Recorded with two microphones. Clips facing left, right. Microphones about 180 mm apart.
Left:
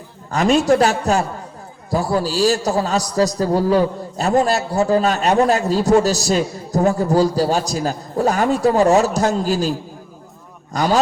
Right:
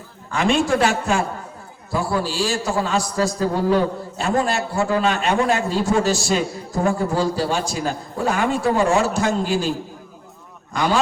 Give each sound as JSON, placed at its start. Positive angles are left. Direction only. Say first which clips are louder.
{"t": 0.3, "sound": "a man's voice", "louder": "left 4 dB", "side_deg": 40}